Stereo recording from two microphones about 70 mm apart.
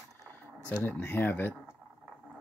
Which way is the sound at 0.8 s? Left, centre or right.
Left.